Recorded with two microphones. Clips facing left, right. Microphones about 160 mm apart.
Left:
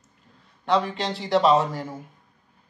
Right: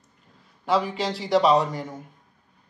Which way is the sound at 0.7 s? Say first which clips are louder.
Even; centre (ahead or behind).